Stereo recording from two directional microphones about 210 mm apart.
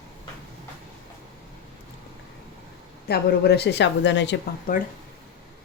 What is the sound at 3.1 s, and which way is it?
A woman's voice, 50° left (ahead or behind).